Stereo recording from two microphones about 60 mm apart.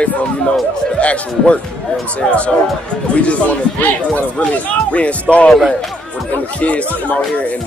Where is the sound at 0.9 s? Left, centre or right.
Left.